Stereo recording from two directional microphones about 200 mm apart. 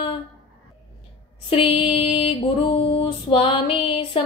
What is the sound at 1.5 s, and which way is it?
Mantra, 30° left (ahead or behind).